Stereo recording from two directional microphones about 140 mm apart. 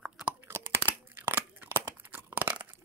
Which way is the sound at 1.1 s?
10° right (ahead or behind).